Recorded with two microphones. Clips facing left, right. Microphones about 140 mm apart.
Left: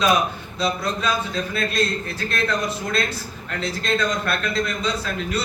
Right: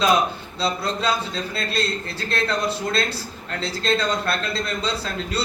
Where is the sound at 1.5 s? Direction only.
30° right (ahead or behind).